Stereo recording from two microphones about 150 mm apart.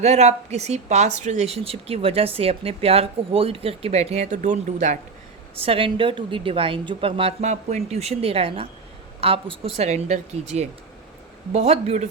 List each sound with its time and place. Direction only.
0.0 s speech: 45° right (ahead or behind)
5.5 s a woman's voice: 40° right (ahead or behind)